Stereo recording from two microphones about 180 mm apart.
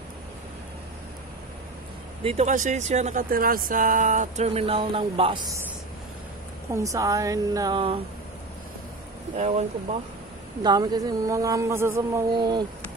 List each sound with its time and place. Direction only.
2.2 s speech: 40° right (ahead or behind)
6.7 s speech: 20° right (ahead or behind)
9.4 s speech: 40° right (ahead or behind)
10.6 s speech: 25° right (ahead or behind)